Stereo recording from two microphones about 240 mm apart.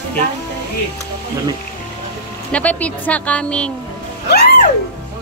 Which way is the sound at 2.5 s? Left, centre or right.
Centre.